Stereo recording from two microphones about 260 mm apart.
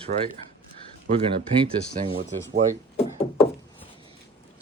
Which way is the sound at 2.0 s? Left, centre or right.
Right.